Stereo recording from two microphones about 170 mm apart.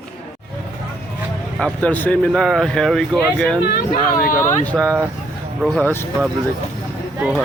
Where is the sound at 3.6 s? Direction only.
60° left (ahead or behind).